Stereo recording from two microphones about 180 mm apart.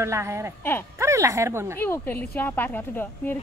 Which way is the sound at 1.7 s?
10° left (ahead or behind).